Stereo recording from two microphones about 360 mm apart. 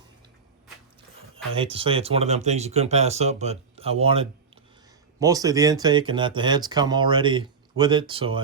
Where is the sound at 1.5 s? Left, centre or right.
Centre.